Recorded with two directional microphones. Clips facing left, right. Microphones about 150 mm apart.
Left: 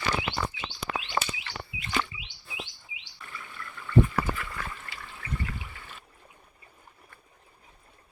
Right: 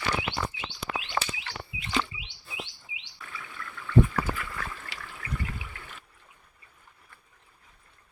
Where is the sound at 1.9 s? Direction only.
20° right (ahead or behind).